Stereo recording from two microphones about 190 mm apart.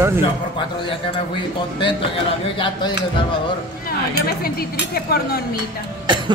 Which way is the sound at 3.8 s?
50° left (ahead or behind).